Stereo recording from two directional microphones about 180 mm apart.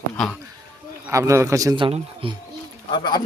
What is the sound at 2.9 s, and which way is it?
Speech, 25° left (ahead or behind).